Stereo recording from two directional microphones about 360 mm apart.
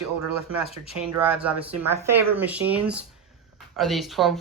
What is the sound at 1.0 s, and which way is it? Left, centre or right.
Speech, centre.